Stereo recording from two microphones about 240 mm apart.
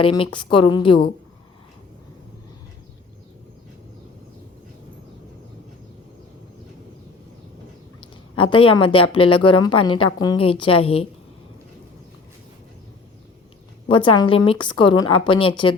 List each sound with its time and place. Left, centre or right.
0.3 s a woman's voice: centre
8.4 s a woman's voice: left
13.8 s a woman's voice: left